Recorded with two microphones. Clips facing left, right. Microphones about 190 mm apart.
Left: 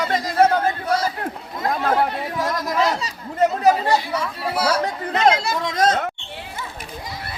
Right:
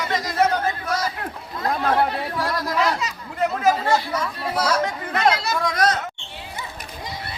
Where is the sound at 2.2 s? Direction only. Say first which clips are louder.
Left 1 dB; 20° left (ahead or behind).